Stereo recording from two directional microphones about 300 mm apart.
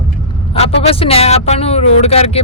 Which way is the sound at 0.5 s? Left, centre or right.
Centre.